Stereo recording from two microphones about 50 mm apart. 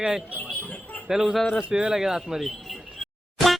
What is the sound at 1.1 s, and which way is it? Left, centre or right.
Speech, centre.